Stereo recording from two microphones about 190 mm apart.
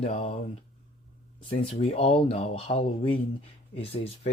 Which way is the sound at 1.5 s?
30° left (ahead or behind).